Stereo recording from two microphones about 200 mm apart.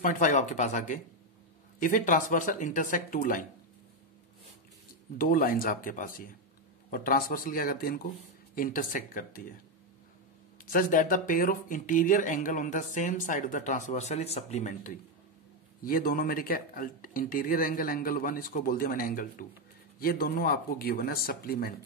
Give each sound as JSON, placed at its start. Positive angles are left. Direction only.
{"t": 0.0, "sound": "speech", "side_deg": 40}
{"t": 5.1, "sound": "speech", "side_deg": 45}
{"t": 10.6, "sound": "speech", "side_deg": 45}